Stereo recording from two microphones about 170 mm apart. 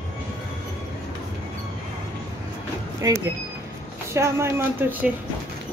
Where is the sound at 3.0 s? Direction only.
20° right (ahead or behind).